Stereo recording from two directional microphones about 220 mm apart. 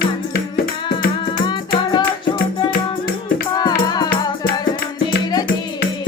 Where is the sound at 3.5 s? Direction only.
20° left (ahead or behind).